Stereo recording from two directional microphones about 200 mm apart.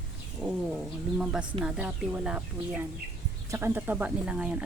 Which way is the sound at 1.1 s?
5° right (ahead or behind).